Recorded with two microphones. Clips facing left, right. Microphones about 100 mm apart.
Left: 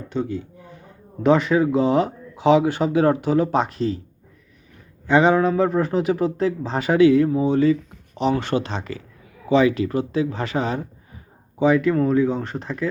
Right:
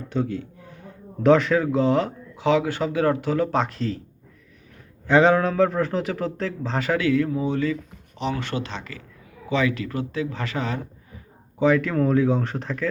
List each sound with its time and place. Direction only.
0.1 s a man's voice: centre (ahead or behind)
5.0 s speech: 5° left (ahead or behind); by 10.8 s 20° left (ahead or behind)
11.6 s speech: 5° left (ahead or behind)